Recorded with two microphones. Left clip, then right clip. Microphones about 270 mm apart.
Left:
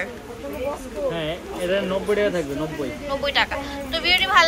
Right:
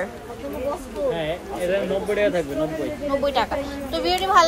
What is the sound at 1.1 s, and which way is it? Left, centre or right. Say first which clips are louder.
Speech: right 2 dB; centre.